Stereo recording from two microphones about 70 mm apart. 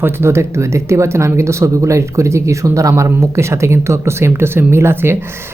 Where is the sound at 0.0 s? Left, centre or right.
Right.